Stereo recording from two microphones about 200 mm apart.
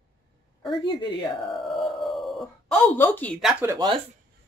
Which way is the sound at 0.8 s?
20° left (ahead or behind).